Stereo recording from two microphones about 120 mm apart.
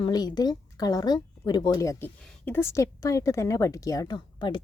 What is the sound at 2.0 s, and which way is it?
A woman's voice, 15° left (ahead or behind).